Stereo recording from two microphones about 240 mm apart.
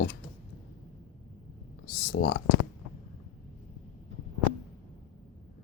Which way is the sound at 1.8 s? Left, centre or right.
Left.